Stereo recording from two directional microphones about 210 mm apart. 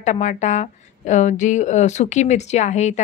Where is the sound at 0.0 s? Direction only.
35° left (ahead or behind).